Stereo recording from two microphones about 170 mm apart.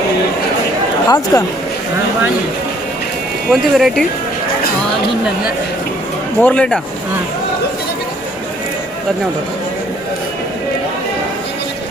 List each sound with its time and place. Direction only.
1.0 s speech: 20° left (ahead or behind)
3.5 s speech: centre (ahead or behind)
6.4 s speech: 5° left (ahead or behind)